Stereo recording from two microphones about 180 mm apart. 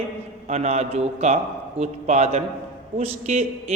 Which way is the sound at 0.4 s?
35° right (ahead or behind).